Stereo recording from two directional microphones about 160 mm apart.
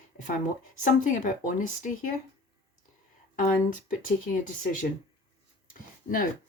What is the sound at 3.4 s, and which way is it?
Speech, 60° left (ahead or behind).